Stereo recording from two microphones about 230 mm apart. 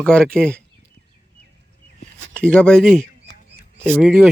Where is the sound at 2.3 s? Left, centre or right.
Centre.